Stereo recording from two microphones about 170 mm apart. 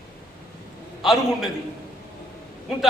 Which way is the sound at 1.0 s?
Centre (ahead or behind).